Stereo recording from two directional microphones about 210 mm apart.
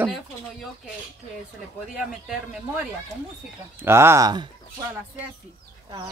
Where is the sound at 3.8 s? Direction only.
10° right (ahead or behind).